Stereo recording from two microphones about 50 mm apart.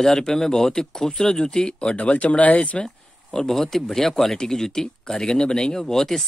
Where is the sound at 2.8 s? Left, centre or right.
Centre.